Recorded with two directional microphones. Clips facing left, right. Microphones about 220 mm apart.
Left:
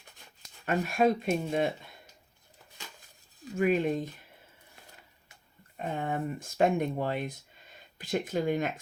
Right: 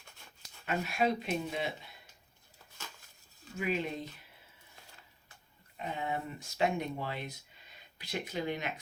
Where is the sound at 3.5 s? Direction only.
50° left (ahead or behind).